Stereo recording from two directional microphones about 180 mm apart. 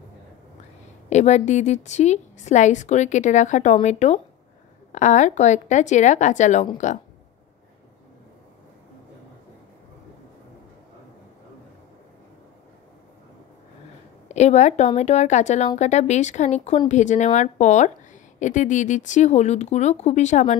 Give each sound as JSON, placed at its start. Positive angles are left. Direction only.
{"t": 1.1, "sound": "speech", "side_deg": 40}
{"t": 14.3, "sound": "a woman's voice", "side_deg": 40}